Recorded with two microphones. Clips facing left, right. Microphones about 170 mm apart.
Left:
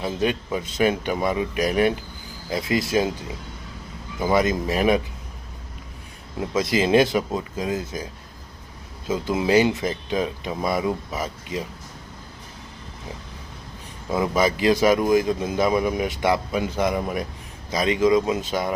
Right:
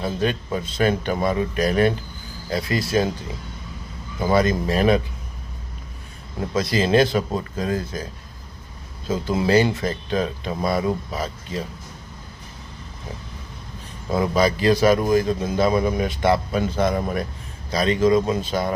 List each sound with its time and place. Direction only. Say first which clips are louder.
0.0 s a man's voice: even; 15° left (ahead or behind)
4.2 s a man's voice: right 1 dB; 15° left (ahead or behind)
6.6 s a man's voice: even; 20° left (ahead or behind)
9.0 s a man's voice: right 1 dB; 15° left (ahead or behind)
14.1 s a man's voice: right 1 dB; 15° left (ahead or behind)